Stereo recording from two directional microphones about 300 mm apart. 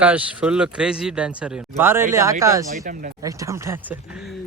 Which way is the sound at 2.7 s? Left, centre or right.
Right.